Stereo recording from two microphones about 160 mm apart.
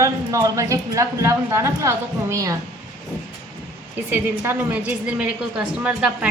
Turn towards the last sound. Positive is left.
turn(degrees=-5)  # may be behind; listen again after turning